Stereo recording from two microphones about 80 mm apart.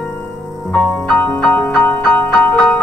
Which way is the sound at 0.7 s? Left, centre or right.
Centre.